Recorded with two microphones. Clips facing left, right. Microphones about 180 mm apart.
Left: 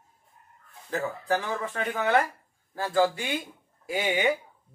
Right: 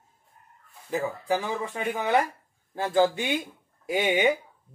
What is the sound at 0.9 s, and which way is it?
Speech, 10° right (ahead or behind).